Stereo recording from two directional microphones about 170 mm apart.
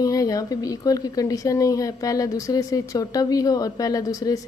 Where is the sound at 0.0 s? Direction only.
20° left (ahead or behind).